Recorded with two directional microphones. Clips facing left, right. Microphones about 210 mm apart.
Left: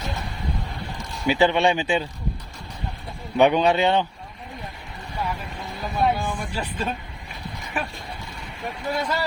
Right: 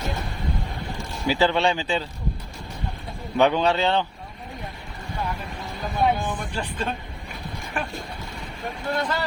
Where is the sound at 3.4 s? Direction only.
15° left (ahead or behind).